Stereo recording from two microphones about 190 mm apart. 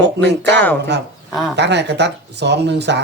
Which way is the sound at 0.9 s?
65° right (ahead or behind).